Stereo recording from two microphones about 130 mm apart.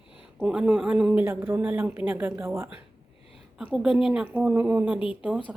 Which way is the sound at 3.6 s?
5° right (ahead or behind).